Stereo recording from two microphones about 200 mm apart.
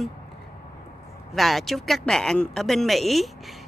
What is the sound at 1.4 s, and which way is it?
Speech, centre (ahead or behind).